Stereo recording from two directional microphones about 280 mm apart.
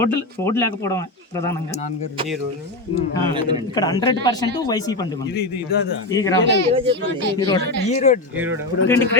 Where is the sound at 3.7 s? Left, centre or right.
Centre.